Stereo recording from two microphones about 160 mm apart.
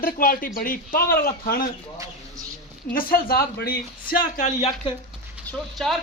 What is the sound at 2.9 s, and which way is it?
Speech, 65° left (ahead or behind).